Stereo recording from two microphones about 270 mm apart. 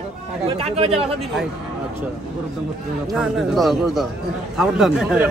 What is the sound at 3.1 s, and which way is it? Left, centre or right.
Speech, centre.